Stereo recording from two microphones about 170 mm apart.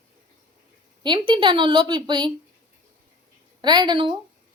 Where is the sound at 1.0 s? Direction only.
30° right (ahead or behind).